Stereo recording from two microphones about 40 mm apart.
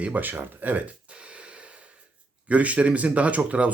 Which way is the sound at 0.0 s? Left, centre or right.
Right.